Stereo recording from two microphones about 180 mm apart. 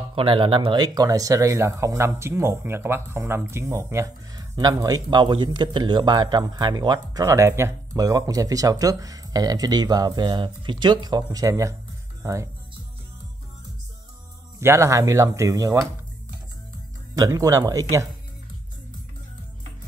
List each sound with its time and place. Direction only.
0.1 s speech: 30° right (ahead or behind)
14.6 s speech: 15° right (ahead or behind)
17.1 s speech: 20° right (ahead or behind)